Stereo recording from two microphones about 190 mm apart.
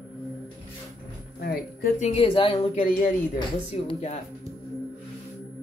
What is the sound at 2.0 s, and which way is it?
A woman's voice, 35° left (ahead or behind).